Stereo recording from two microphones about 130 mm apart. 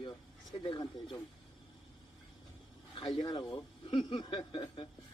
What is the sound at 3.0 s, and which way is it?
Speech, 35° left (ahead or behind).